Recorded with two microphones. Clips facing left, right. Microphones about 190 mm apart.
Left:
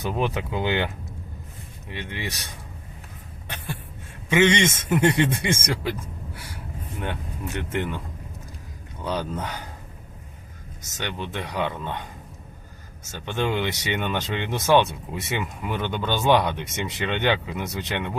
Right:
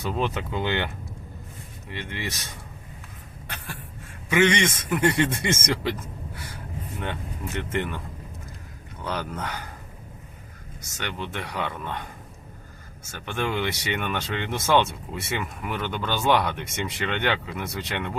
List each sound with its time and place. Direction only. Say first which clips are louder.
0.0 s speech: left 1 dB; 15° left (ahead or behind)
1.9 s speech: left 1 dB; 15° left (ahead or behind)
4.3 s speech: left 2 dB; 25° left (ahead or behind)
7.0 s speech: left 2 dB; 15° left (ahead or behind)
10.9 s speech: left 2 dB; 15° left (ahead or behind)
13.1 s speech: left 3 dB; 20° left (ahead or behind)